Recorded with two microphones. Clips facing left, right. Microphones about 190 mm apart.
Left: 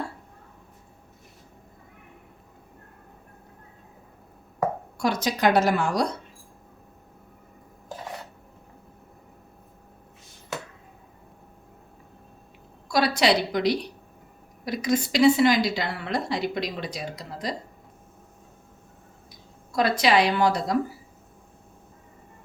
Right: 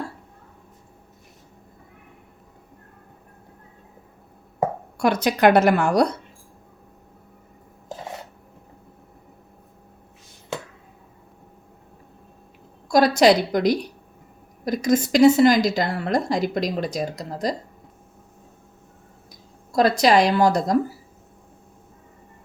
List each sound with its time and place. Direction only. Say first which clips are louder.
4.9 s a woman's voice: right 6 dB; 65° right (ahead or behind)
12.9 s a woman's voice: right 6 dB; 45° right (ahead or behind)
19.7 s a woman's voice: right 4 dB; 40° right (ahead or behind)